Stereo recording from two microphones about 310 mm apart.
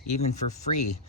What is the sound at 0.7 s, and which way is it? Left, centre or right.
Speech, left.